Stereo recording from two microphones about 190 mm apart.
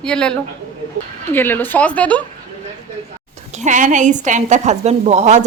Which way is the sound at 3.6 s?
40° right (ahead or behind).